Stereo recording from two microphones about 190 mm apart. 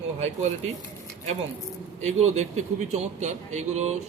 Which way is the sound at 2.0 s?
35° right (ahead or behind).